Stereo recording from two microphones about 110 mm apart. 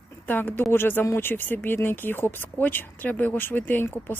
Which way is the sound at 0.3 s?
15° left (ahead or behind).